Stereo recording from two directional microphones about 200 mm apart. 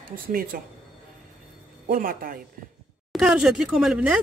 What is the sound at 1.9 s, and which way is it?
Speech, 45° right (ahead or behind).